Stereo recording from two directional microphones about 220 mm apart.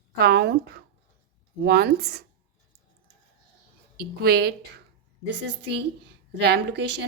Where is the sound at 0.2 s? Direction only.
50° right (ahead or behind).